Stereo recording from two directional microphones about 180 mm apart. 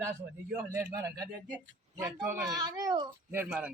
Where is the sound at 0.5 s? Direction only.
15° right (ahead or behind).